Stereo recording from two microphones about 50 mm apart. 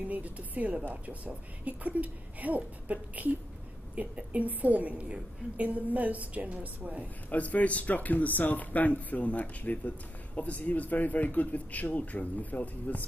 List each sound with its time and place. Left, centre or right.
0.1 s a woman's voice: right
7.2 s speech: left